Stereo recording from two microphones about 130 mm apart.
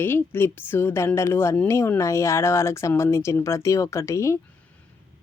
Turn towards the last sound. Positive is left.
turn(degrees=20)  # may be behind; listen again after turning